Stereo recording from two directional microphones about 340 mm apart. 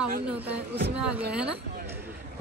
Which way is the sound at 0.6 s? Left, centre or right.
Right.